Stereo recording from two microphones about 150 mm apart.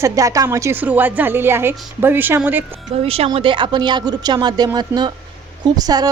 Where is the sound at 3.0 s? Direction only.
40° right (ahead or behind).